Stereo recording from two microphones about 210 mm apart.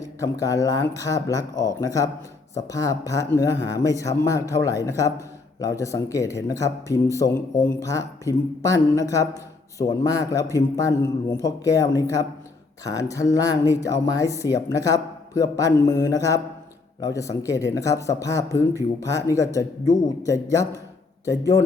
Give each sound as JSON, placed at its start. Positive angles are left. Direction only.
{"t": 0.0, "sound": "speech", "side_deg": 15}